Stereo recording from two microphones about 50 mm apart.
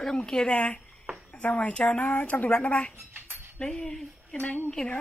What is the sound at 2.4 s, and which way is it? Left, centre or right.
Speech, left.